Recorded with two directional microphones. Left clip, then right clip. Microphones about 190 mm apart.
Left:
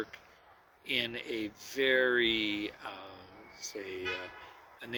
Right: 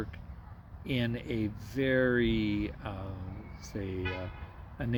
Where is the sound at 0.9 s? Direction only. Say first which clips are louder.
Left 1 dB; 20° right (ahead or behind).